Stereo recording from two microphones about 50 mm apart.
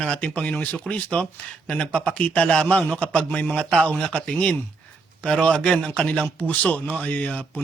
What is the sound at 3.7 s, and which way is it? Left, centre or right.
A man's voice, centre.